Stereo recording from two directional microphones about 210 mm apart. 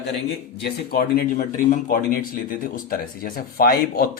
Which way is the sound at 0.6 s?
45° left (ahead or behind).